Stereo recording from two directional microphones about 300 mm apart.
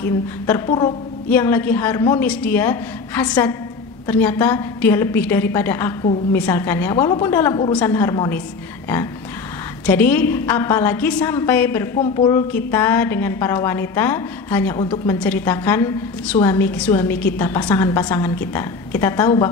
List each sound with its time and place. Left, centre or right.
0.0 s a woman's voice: centre
9.8 s a woman's voice: centre